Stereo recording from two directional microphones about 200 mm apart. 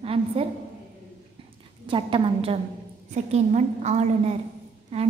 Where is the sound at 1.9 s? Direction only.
25° right (ahead or behind).